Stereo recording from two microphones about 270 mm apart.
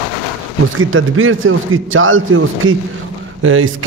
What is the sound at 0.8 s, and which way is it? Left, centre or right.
Speech, right.